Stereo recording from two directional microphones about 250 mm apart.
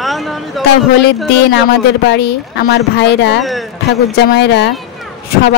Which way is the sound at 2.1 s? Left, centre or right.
Left.